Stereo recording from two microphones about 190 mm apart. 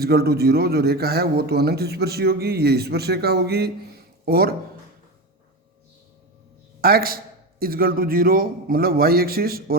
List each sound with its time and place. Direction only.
0.0 s a man's voice: 55° right (ahead or behind)
6.8 s a man's voice: 50° right (ahead or behind)